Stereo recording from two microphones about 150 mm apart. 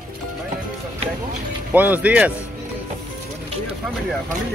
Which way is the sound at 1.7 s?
10° right (ahead or behind).